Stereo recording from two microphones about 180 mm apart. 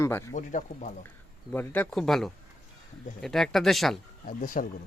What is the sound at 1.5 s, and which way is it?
Speech, 10° left (ahead or behind).